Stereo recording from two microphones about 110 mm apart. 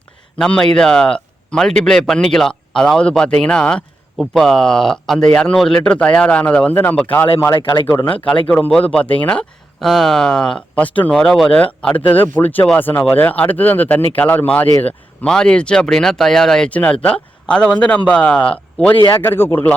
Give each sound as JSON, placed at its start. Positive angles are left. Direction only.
{"t": 0.3, "sound": "a man's voice", "side_deg": 5}